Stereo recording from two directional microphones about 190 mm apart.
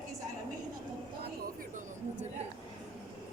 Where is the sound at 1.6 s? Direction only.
40° right (ahead or behind).